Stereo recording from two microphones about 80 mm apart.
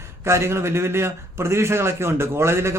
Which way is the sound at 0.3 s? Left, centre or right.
Right.